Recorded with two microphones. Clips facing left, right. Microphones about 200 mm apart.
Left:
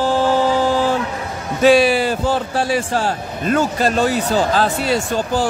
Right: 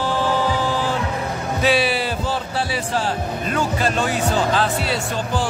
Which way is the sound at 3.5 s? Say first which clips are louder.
Left 5 dB; 40° left (ahead or behind).